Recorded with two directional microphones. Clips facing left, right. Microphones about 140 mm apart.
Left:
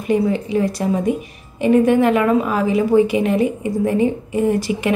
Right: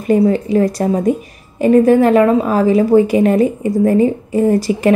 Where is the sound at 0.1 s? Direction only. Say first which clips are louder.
Right 5 dB; 40° right (ahead or behind).